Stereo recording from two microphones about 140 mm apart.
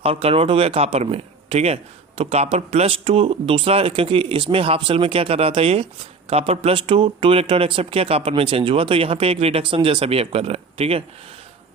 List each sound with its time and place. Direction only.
0.0 s speech: 45° right (ahead or behind)